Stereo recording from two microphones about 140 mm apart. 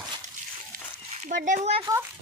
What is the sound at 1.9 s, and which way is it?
Speech, 25° right (ahead or behind).